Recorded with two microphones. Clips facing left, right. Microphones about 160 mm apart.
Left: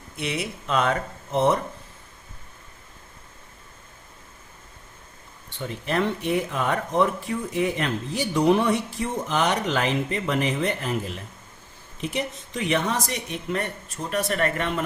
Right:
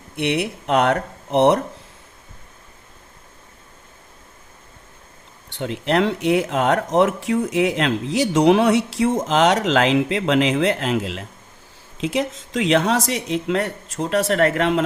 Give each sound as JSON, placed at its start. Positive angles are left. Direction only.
{"t": 0.2, "sound": "speech", "side_deg": -65}
{"t": 5.5, "sound": "speech", "side_deg": -80}